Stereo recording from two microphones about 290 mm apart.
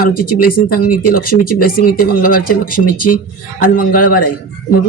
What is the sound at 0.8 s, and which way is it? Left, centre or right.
Speech, left.